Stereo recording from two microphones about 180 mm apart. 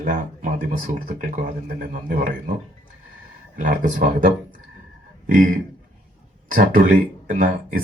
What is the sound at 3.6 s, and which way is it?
Speech, 50° right (ahead or behind).